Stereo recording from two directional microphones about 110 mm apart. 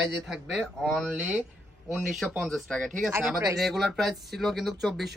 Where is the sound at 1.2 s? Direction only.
10° right (ahead or behind).